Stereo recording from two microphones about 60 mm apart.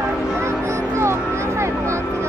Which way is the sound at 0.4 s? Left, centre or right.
Right.